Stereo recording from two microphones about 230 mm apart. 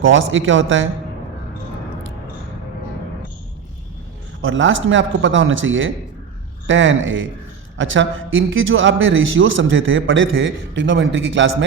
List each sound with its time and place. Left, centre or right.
0.0 s a man's voice: right
4.4 s a man's voice: right